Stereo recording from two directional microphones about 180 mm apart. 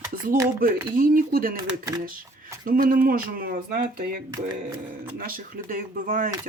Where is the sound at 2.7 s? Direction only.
50° right (ahead or behind).